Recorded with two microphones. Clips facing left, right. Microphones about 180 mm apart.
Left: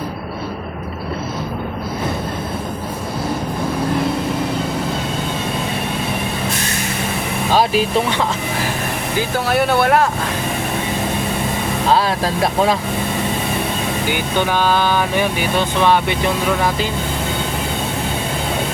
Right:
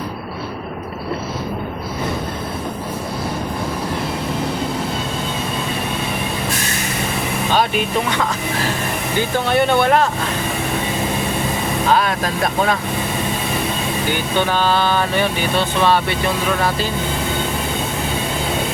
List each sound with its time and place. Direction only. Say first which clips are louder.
9.5 s speech: even; 5° left (ahead or behind)
11.9 s speech: left 2 dB; 30° left (ahead or behind)
14.1 s speech: even; 15° left (ahead or behind)